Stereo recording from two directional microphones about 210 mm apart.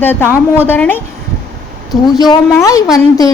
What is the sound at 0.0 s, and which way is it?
A woman's voice, 10° left (ahead or behind).